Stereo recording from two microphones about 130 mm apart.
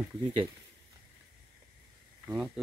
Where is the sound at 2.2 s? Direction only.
5° right (ahead or behind).